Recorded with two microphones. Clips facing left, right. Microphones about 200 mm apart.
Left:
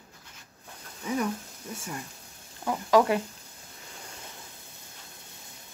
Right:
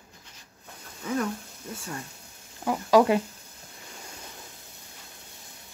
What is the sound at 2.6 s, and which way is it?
Speech, 15° right (ahead or behind).